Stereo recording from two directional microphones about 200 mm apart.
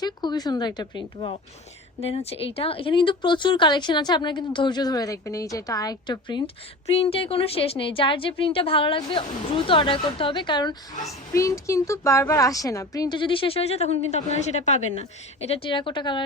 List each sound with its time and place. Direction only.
0.0 s a woman's voice: 20° left (ahead or behind)